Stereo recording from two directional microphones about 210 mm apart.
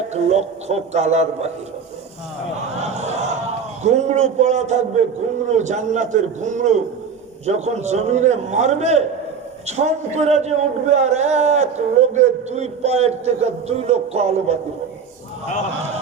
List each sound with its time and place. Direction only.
0.1 s a man's voice: 30° right (ahead or behind)
2.6 s a sound: 30° right (ahead or behind)
3.8 s a man's voice: 30° right (ahead or behind)